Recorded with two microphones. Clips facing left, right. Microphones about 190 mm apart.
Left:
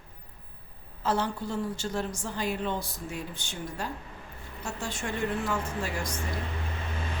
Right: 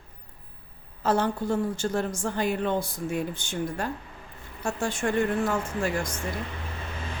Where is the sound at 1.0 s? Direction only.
50° right (ahead or behind).